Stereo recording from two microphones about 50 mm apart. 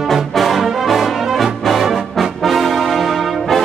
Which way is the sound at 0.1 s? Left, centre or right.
Centre.